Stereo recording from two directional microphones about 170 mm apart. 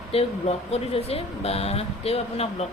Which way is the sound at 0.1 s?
35° left (ahead or behind).